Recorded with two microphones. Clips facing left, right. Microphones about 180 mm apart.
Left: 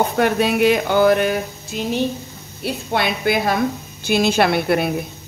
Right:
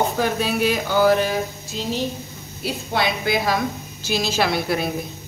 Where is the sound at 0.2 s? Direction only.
65° left (ahead or behind).